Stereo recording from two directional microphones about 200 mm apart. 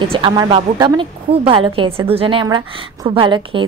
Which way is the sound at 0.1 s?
25° right (ahead or behind).